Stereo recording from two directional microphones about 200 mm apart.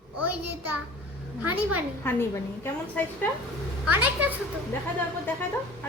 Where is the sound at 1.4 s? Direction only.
10° right (ahead or behind).